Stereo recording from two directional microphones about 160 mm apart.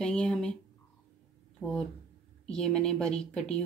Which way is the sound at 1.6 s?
5° left (ahead or behind).